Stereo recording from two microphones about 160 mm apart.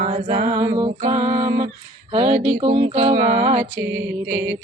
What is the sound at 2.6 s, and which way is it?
Mantra, 35° right (ahead or behind).